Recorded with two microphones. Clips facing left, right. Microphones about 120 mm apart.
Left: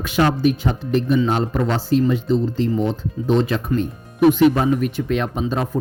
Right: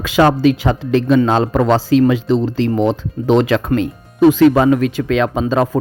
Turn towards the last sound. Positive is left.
turn(degrees=-90)